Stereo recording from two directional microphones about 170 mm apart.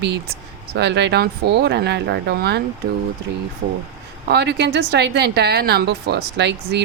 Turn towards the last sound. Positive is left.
turn(degrees=-80)